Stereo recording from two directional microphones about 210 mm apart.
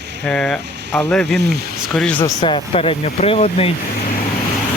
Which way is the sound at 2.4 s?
25° left (ahead or behind).